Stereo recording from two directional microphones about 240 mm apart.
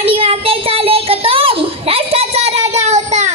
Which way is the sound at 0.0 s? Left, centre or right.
Right.